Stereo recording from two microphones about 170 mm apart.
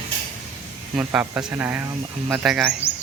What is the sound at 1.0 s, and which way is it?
Speech, 5° right (ahead or behind).